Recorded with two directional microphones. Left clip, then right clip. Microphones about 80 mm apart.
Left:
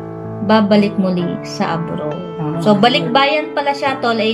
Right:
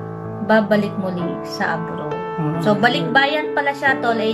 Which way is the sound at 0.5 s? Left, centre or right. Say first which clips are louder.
Left 3 dB; centre.